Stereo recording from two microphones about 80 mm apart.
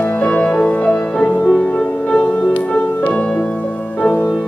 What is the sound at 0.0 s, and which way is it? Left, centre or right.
Music, centre.